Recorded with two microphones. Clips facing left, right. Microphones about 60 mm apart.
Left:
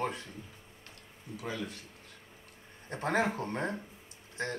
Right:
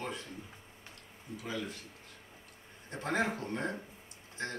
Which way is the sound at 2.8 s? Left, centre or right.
Left.